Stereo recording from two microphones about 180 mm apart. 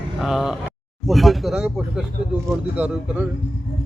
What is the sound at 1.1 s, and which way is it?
Speech, centre (ahead or behind).